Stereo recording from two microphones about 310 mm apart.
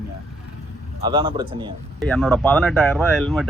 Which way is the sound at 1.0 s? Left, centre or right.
Centre.